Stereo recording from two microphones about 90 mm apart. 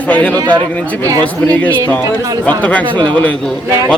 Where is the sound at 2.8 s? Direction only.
60° right (ahead or behind).